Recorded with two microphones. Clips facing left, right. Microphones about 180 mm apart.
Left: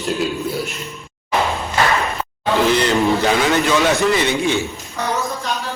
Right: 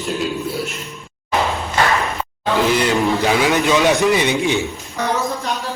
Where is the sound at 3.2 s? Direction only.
15° right (ahead or behind).